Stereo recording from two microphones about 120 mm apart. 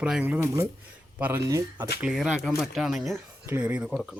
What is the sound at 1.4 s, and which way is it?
Speech, 30° right (ahead or behind).